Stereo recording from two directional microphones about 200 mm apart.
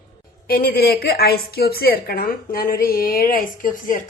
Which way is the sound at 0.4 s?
50° left (ahead or behind).